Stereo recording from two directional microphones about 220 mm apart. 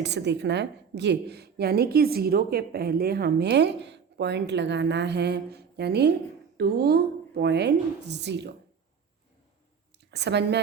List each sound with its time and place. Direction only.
0.0 s a woman's voice: 50° right (ahead or behind)
10.1 s a woman's voice: 50° right (ahead or behind)